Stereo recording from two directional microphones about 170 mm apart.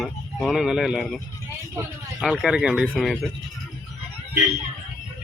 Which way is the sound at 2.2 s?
5° right (ahead or behind).